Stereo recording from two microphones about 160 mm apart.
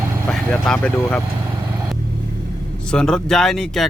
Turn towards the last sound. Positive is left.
turn(degrees=0)  # may be behind; listen again after turning